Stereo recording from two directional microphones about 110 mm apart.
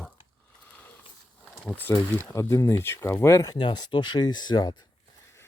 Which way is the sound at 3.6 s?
45° left (ahead or behind).